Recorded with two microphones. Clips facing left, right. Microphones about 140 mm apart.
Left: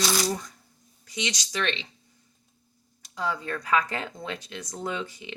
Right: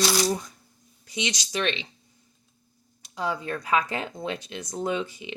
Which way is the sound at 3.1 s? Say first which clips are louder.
Right 1 dB; 15° right (ahead or behind).